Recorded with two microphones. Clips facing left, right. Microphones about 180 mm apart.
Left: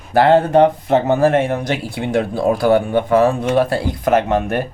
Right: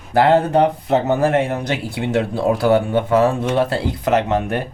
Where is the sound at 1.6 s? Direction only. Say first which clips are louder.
Left 1 dB; 20° right (ahead or behind).